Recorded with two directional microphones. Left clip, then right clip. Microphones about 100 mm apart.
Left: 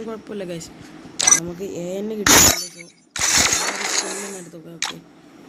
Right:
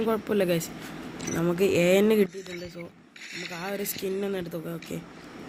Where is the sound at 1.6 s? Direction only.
35° right (ahead or behind).